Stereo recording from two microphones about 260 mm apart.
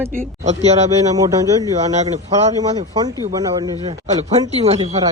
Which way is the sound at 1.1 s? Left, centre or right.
Centre.